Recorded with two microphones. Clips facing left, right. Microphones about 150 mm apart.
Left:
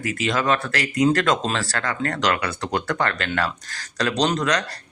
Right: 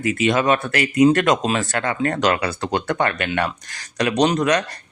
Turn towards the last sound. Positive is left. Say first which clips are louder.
# right 4 dB
turn(degrees=-25)  # may be behind; listen again after turning